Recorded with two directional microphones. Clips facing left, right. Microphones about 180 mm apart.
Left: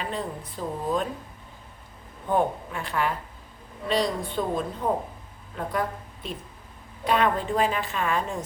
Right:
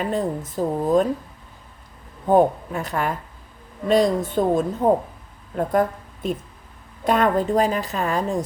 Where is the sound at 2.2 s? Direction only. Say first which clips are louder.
Right 8 dB; 40° right (ahead or behind).